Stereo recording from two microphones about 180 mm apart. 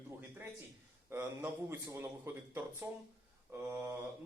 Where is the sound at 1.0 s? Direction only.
15° right (ahead or behind).